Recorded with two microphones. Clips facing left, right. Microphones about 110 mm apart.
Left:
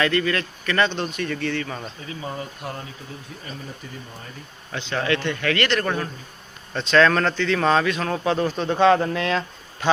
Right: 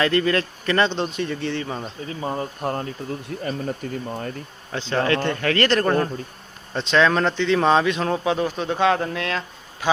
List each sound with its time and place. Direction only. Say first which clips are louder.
0.0 s speech: right 2 dB; 30° right (ahead or behind)
2.0 s a man's voice: right 5 dB; 35° right (ahead or behind)
3.2 s speech: right 12 dB; 60° right (ahead or behind)
4.7 s a man's voice: right 3 dB; 35° right (ahead or behind)
6.7 s speech: left 1 dB; 15° right (ahead or behind)
8.2 s a man's voice: even; 10° right (ahead or behind)